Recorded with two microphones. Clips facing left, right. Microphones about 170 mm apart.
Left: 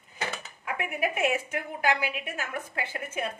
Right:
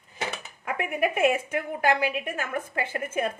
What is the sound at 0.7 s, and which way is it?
A woman's voice, 50° right (ahead or behind).